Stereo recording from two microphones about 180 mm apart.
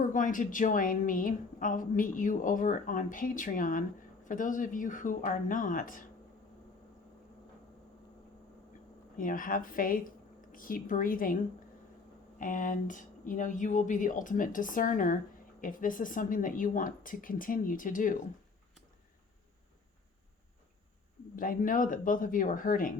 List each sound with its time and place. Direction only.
0.0 s a woman's voice: 45° left (ahead or behind)
9.1 s a woman's voice: 50° left (ahead or behind)
12.4 s a woman's voice: 45° left (ahead or behind)
21.3 s a woman's voice: 50° left (ahead or behind)